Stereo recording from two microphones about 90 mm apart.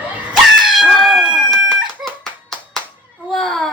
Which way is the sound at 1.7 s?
5° left (ahead or behind).